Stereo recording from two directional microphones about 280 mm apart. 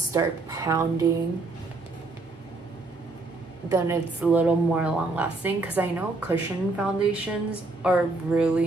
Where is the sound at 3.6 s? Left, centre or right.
Centre.